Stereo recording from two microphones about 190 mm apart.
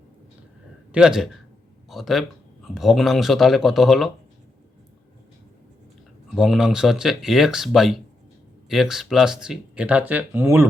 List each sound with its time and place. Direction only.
0.9 s speech: 5° right (ahead or behind)
6.3 s speech: centre (ahead or behind)